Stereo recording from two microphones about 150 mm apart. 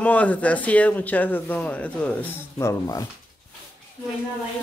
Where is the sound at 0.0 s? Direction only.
10° left (ahead or behind).